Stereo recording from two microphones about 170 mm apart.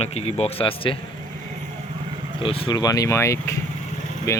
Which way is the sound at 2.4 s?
30° left (ahead or behind).